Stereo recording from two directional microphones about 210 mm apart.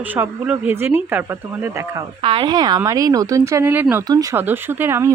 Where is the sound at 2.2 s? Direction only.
25° right (ahead or behind).